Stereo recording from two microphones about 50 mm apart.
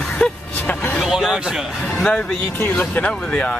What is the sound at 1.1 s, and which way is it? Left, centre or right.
Speech, centre.